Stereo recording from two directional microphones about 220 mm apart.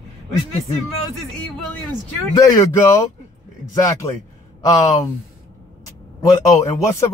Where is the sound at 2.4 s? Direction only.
15° left (ahead or behind).